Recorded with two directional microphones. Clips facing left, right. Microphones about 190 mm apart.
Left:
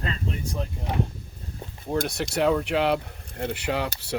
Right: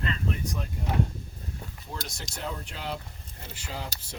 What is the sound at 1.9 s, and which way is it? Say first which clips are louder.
Speech: left 15 dB; 60° left (ahead or behind).